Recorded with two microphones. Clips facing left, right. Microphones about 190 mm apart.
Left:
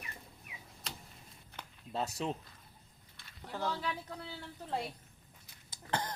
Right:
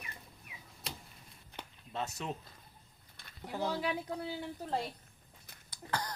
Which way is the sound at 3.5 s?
15° right (ahead or behind).